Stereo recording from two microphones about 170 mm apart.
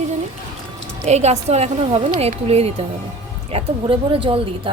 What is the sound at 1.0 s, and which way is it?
A woman's voice, 40° right (ahead or behind).